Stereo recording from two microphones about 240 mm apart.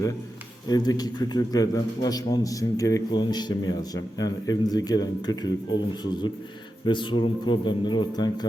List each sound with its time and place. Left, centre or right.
0.7 s a man's voice: centre